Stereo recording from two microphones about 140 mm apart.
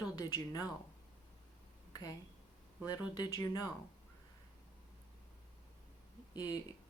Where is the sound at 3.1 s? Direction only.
25° left (ahead or behind).